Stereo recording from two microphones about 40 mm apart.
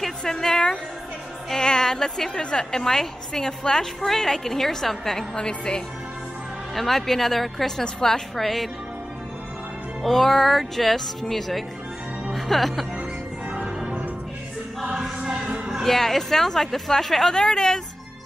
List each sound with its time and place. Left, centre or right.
0.2 s a woman's voice: centre
5.4 s speech: left
6.7 s a woman's voice: centre
8.4 s speech: centre
10.0 s speech: centre
13.6 s change ringing: centre
15.8 s a woman's voice: centre
17.3 s a woman's voice: centre